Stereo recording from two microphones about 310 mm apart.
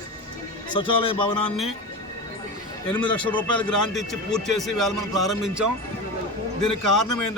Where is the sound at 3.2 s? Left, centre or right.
Centre.